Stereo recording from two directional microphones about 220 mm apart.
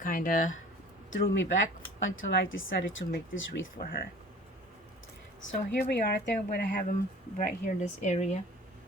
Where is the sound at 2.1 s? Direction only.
65° left (ahead or behind).